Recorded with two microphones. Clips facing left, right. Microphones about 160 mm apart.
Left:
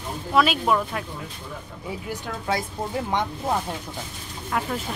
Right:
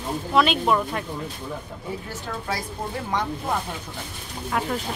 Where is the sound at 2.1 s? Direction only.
25° left (ahead or behind).